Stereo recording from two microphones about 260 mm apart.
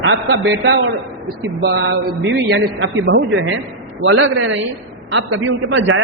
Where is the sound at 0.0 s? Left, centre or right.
Right.